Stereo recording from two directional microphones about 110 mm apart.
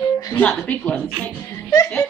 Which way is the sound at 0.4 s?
10° left (ahead or behind).